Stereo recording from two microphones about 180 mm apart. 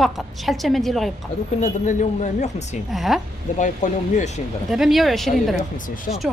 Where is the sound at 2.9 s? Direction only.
Centre (ahead or behind).